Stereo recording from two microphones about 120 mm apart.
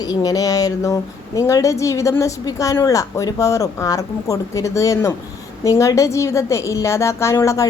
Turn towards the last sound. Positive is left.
turn(degrees=25)  # may be behind; listen again after turning